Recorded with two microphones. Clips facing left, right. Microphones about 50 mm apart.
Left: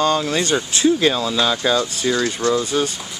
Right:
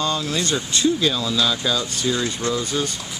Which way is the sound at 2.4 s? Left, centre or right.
Right.